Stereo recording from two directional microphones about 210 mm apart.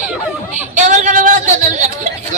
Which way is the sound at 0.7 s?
35° right (ahead or behind).